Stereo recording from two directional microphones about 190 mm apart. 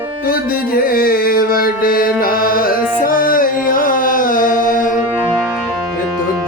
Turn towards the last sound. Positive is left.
turn(degrees=45)  # may be behind; listen again after turning